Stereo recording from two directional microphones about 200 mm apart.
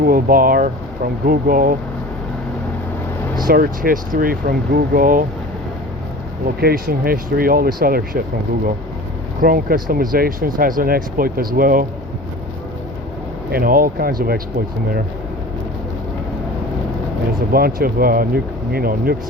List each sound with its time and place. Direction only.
0.0 s speech: 45° right (ahead or behind)
3.3 s speech: 45° right (ahead or behind)
6.6 s speech: 50° right (ahead or behind)
9.4 s speech: 45° right (ahead or behind)
13.5 s speech: 45° right (ahead or behind)
17.5 s speech: 50° right (ahead or behind)